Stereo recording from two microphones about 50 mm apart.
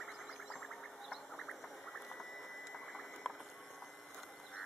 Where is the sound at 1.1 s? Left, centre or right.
Centre.